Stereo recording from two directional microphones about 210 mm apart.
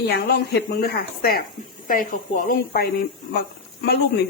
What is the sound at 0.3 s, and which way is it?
Speech, 50° left (ahead or behind).